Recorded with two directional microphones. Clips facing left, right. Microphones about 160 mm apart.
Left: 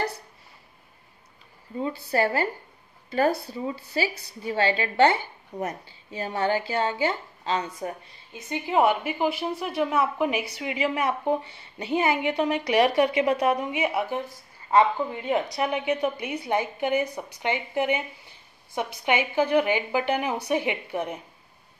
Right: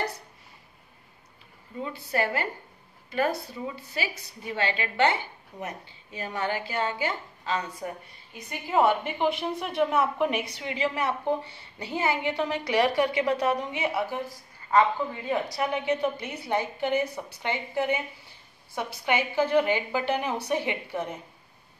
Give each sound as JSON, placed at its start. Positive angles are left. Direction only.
{"t": 1.8, "sound": "a woman's voice", "side_deg": 35}
{"t": 15.2, "sound": "a woman's voice", "side_deg": 20}